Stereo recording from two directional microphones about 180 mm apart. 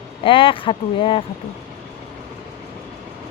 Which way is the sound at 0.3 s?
30° left (ahead or behind).